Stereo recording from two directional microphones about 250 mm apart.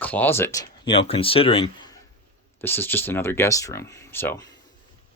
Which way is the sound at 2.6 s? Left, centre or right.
Centre.